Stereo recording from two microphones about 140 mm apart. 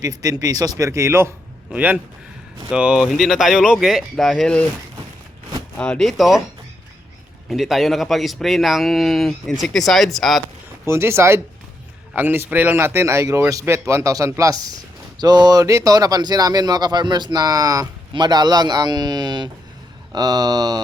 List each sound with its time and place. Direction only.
0.0 s a man's voice: 25° right (ahead or behind); by 4.6 s 5° left (ahead or behind)
5.7 s a man's voice: 5° left (ahead or behind)
7.5 s a man's voice: centre (ahead or behind)
10.8 s a man's voice: 20° right (ahead or behind)